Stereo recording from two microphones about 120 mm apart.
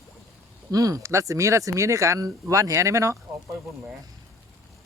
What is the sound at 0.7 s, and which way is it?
Speech, 30° right (ahead or behind).